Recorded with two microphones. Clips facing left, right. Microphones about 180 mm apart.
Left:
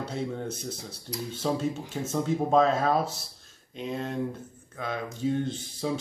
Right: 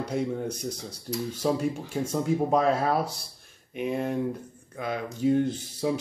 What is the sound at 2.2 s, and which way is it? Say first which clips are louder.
A man's voice: left 1 dB; 10° right (ahead or behind).